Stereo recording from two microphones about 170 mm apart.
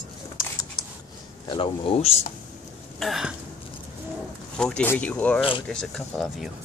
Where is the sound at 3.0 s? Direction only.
Centre (ahead or behind).